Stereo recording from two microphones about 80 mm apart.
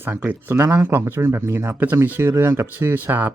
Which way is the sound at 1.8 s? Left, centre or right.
Right.